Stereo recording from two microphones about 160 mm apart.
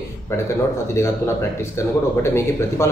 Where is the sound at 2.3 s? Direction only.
15° left (ahead or behind).